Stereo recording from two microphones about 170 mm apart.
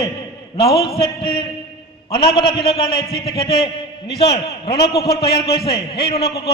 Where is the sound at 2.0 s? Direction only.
35° left (ahead or behind).